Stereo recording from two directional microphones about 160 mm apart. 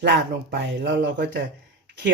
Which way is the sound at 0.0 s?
90° right.